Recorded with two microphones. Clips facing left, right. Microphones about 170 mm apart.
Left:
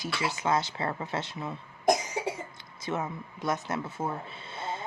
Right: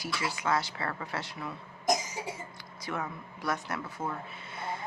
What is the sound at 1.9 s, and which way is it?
Cough, 60° left (ahead or behind).